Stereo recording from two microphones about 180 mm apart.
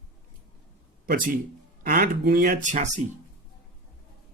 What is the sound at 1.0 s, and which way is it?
Speech, 50° right (ahead or behind).